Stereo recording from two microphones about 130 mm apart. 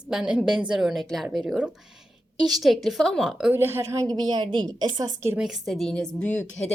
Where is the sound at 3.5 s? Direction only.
20° right (ahead or behind).